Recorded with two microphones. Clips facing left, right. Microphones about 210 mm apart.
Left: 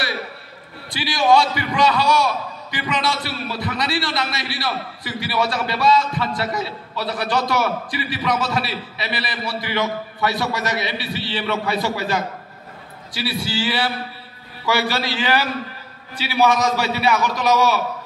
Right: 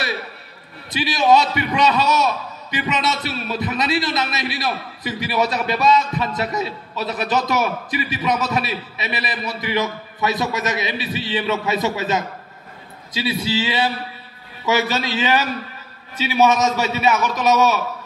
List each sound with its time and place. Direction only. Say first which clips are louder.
0.8 s a man's voice: right 1 dB; 20° right (ahead or behind)